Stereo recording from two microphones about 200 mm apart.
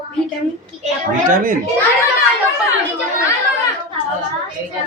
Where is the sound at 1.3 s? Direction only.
45° right (ahead or behind).